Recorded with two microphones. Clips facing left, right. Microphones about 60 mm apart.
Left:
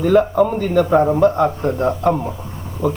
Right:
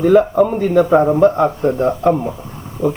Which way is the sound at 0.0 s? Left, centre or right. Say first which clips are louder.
Right 2 dB; centre.